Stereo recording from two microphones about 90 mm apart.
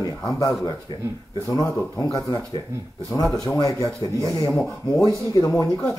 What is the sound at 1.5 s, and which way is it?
Speech, 40° left (ahead or behind).